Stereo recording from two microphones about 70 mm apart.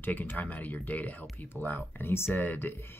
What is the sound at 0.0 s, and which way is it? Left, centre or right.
Speech, left.